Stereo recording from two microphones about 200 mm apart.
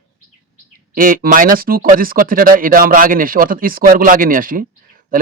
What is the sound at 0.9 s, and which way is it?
Speech, 45° right (ahead or behind).